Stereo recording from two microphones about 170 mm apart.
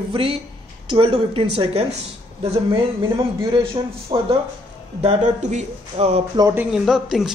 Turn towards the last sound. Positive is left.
turn(degrees=0)  # may be behind; listen again after turning